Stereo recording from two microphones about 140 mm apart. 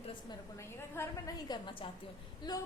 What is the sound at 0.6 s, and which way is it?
A woman's voice, 20° left (ahead or behind).